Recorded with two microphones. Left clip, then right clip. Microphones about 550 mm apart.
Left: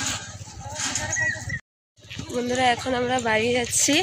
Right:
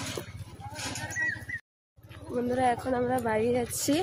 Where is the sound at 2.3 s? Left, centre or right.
Right.